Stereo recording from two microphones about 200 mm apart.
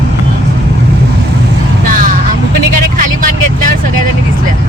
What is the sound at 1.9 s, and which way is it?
Vehicle, 45° right (ahead or behind).